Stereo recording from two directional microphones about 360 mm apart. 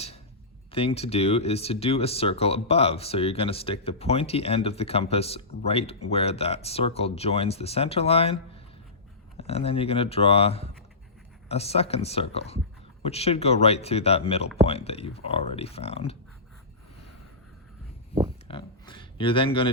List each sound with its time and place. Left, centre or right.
0.7 s speech: centre
9.4 s speech: centre
18.4 s a sound: centre